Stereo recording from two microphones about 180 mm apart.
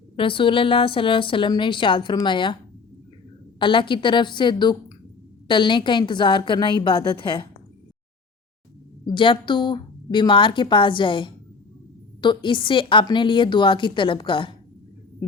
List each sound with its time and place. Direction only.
0.2 s a woman's voice: 30° left (ahead or behind)
3.6 s a woman's voice: 25° left (ahead or behind)
9.0 s a woman's voice: 30° left (ahead or behind)